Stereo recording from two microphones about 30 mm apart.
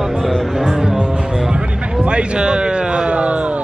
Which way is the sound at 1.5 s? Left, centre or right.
Right.